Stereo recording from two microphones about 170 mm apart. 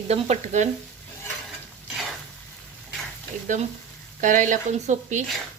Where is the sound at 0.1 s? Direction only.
40° right (ahead or behind).